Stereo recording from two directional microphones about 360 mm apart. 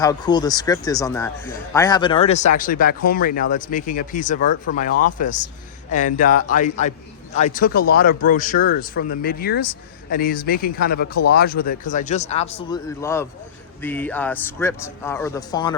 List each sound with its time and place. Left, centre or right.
0.0 s a man's voice: centre